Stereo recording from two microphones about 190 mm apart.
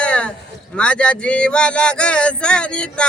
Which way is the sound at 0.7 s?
5° left (ahead or behind).